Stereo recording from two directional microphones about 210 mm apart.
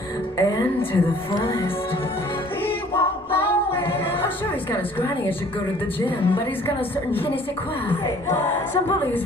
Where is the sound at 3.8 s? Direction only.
10° left (ahead or behind).